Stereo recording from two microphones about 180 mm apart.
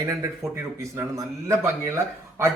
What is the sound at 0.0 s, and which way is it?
A man's voice, 20° right (ahead or behind).